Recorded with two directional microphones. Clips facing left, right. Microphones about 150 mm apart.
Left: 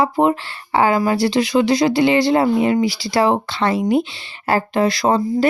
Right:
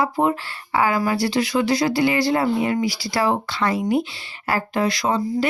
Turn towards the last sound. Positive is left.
turn(degrees=30)  # may be behind; listen again after turning